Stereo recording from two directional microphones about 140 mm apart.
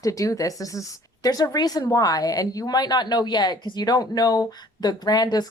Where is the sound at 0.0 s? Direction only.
25° left (ahead or behind).